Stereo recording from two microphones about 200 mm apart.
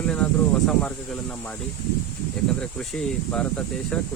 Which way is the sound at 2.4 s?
Centre (ahead or behind).